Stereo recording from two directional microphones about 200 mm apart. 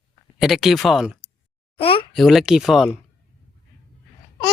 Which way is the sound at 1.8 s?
25° left (ahead or behind).